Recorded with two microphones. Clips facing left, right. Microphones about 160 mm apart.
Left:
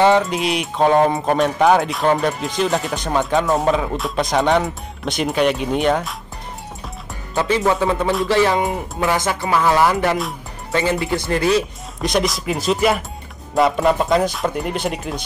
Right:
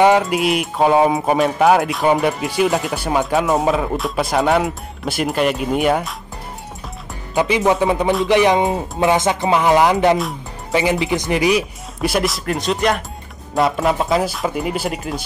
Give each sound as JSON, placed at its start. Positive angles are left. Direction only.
{"t": 0.2, "sound": "speech", "side_deg": -5}
{"t": 7.3, "sound": "speech", "side_deg": -15}